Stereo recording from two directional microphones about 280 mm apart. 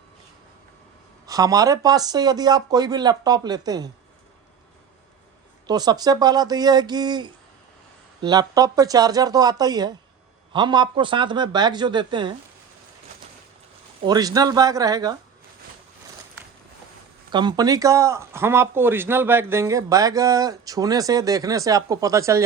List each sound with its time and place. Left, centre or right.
1.3 s speech: centre
5.6 s speech: centre
14.0 s speech: centre
17.3 s speech: centre